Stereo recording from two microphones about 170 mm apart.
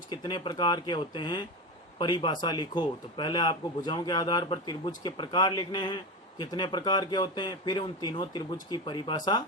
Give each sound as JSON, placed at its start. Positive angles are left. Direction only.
{"t": 0.1, "sound": "speech", "side_deg": 25}